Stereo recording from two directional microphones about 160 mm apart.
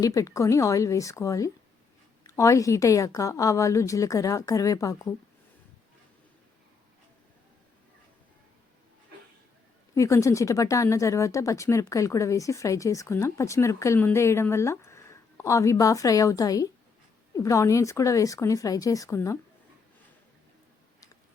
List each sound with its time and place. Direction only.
0.0 s speech: 20° left (ahead or behind)
9.9 s speech: 20° left (ahead or behind)